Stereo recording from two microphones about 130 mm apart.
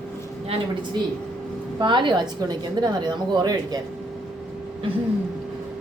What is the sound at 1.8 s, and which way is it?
A woman's voice, 35° right (ahead or behind).